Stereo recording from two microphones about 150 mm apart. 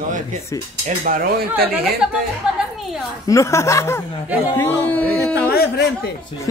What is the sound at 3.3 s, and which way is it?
Speech, 20° left (ahead or behind).